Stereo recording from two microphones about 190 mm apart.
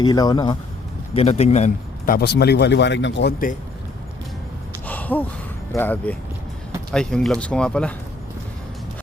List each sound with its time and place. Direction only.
0.0 s speech: 20° left (ahead or behind)
1.1 s a man's voice: 30° left (ahead or behind)
2.1 s speech: 60° left (ahead or behind)
4.9 s sigh: 10° left (ahead or behind)
5.7 s speech: 10° left (ahead or behind)